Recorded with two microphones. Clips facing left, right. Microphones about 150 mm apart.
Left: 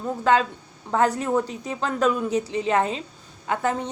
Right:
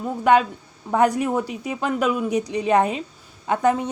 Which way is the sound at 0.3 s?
15° right (ahead or behind).